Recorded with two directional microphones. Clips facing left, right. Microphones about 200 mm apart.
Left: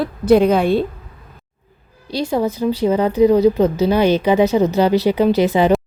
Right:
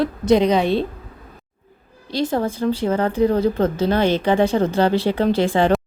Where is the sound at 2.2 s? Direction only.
10° left (ahead or behind).